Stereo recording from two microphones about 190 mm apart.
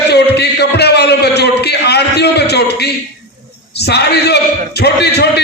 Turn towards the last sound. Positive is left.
turn(degrees=60)  # may be behind; listen again after turning